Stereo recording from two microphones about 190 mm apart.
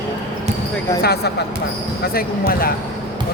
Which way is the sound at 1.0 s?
55° left (ahead or behind).